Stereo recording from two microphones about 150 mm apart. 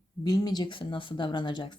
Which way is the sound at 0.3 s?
25° left (ahead or behind).